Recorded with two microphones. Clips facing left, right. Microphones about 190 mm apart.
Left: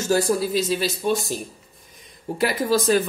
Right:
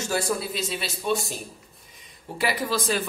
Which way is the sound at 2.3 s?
40° left (ahead or behind).